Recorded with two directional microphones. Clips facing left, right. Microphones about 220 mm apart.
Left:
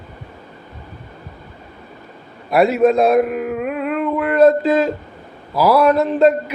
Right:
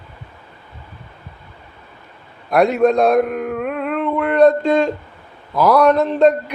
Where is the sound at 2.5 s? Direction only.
5° left (ahead or behind).